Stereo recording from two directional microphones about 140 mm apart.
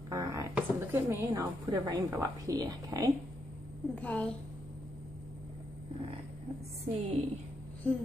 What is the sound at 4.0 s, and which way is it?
Speech, 10° left (ahead or behind).